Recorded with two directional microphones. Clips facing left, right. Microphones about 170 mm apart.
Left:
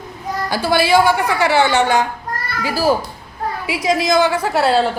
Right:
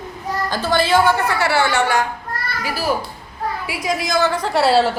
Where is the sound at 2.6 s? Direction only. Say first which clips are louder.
Left 5 dB; 30° left (ahead or behind).